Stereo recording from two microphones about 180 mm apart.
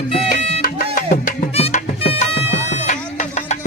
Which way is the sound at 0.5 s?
50° left (ahead or behind).